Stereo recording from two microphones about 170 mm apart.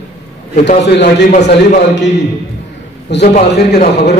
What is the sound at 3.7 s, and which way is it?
Speech, 70° left (ahead or behind).